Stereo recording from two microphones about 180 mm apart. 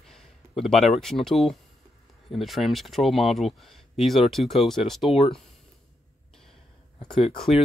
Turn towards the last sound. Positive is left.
turn(degrees=25)  # may be behind; listen again after turning